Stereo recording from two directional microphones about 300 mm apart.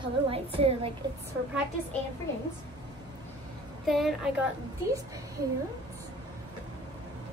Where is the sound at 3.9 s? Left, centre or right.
Centre.